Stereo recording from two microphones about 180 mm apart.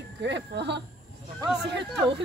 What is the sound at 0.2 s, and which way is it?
Speech, 75° right (ahead or behind).